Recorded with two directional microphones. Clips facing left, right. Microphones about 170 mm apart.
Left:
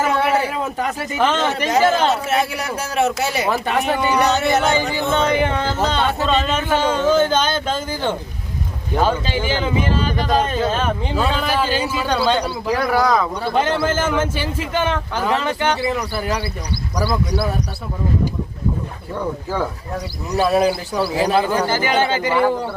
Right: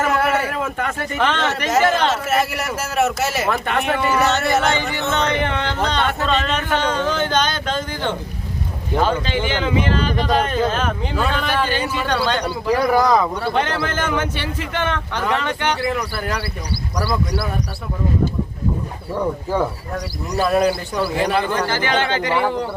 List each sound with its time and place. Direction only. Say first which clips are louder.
0.0 s a sound: left 1 dB; centre (ahead or behind)
0.8 s speech: left 3 dB; centre (ahead or behind)
2.2 s a man's voice: even; 5° right (ahead or behind)
12.7 s speech: right 3 dB; 15° right (ahead or behind)
13.4 s a man's voice: left 2 dB; 5° left (ahead or behind)
15.6 s speech: left 1 dB; 20° left (ahead or behind)
19.1 s speech: right 3 dB; 10° right (ahead or behind)
20.5 s speech: right 1 dB; 5° left (ahead or behind)